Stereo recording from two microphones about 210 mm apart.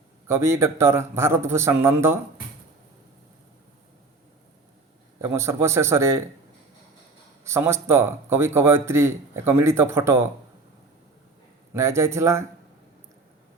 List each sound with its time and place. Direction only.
0.3 s speech: 10° right (ahead or behind)
5.4 s speech: 10° right (ahead or behind)
7.4 s speech: 10° right (ahead or behind)
11.7 s speech: 15° right (ahead or behind)